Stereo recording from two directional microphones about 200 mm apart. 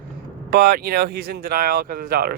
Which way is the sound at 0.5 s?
50° right (ahead or behind).